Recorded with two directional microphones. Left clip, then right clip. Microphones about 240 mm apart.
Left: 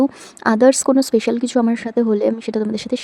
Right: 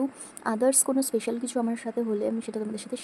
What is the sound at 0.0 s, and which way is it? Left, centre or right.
Speech, left.